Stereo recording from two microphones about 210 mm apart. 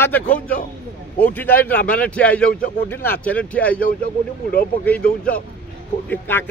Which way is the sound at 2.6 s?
45° left (ahead or behind).